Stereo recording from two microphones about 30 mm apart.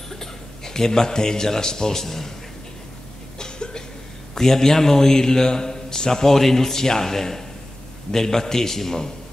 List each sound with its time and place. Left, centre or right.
0.1 s a man's voice: centre
3.3 s cough: left
4.4 s a man's voice: centre